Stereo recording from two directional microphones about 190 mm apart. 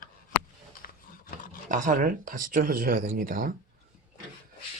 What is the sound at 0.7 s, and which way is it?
Roaring cats, 50° left (ahead or behind).